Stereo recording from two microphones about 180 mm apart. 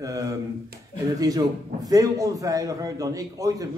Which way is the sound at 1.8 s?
20° right (ahead or behind).